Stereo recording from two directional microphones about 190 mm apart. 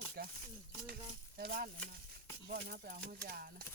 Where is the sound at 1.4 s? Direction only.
50° right (ahead or behind).